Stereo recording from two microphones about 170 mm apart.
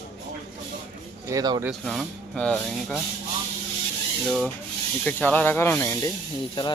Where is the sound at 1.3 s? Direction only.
20° right (ahead or behind).